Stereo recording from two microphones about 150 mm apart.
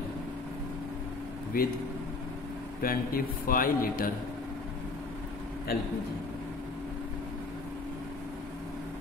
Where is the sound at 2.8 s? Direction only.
75° left (ahead or behind).